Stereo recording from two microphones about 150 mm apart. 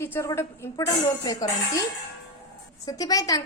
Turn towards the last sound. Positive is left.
turn(degrees=25)  # may be behind; listen again after turning